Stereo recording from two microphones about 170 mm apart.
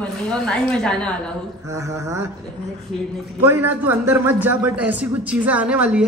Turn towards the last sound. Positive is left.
turn(degrees=-10)  # may be behind; listen again after turning